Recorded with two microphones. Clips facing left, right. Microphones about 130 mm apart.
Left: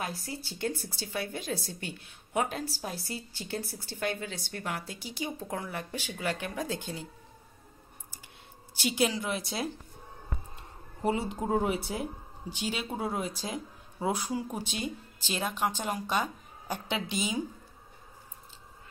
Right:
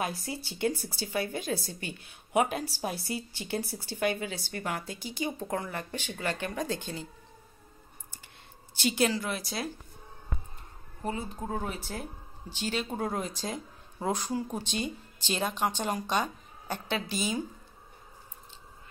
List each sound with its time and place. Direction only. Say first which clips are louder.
0.0 s a woman's voice: right 3 dB; 15° right (ahead or behind)
2.3 s a woman's voice: right 3 dB; 10° right (ahead or behind); by 7.1 s 5° left (ahead or behind)
8.7 s speech: right 1 dB; 10° left (ahead or behind)
11.3 s speech: left 6 dB; 15° left (ahead or behind)